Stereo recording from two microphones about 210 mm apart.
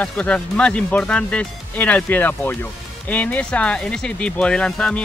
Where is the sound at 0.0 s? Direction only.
5° left (ahead or behind).